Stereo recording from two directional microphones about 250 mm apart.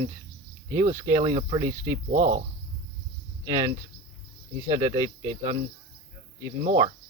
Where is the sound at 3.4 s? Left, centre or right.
Centre.